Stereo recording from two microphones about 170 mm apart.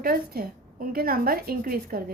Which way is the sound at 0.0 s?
60° right (ahead or behind).